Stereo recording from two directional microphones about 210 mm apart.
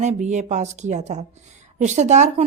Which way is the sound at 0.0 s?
35° right (ahead or behind).